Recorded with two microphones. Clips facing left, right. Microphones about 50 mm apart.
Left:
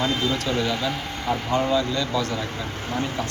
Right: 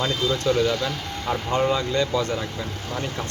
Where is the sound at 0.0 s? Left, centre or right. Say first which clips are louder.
Even; left.